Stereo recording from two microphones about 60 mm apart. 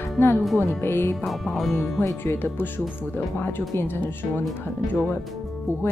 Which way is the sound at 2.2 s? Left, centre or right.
Left.